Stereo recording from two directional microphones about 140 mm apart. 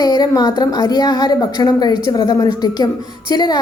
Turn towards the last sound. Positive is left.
turn(degrees=30)  # may be behind; listen again after turning